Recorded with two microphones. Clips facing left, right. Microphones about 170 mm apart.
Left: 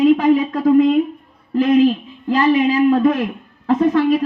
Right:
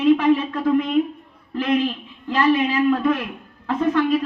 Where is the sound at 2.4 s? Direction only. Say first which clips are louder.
Left 3 dB; 20° left (ahead or behind).